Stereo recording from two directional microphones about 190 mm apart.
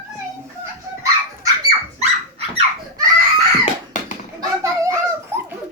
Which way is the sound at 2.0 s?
30° right (ahead or behind).